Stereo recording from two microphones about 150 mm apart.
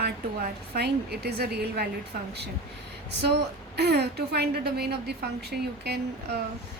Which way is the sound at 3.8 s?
90° right.